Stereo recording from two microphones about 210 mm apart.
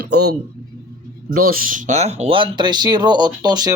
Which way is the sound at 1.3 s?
45° right (ahead or behind).